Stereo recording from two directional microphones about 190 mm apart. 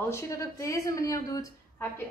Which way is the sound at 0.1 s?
15° left (ahead or behind).